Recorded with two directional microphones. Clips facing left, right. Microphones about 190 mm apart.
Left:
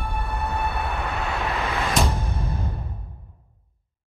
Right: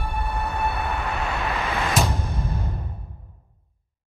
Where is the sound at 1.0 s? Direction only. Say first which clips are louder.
Even; centre (ahead or behind).